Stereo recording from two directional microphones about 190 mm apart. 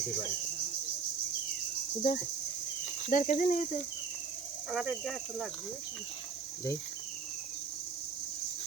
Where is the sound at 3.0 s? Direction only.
40° left (ahead or behind).